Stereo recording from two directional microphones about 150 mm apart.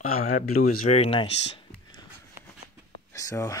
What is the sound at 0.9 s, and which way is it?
Speech, 40° left (ahead or behind).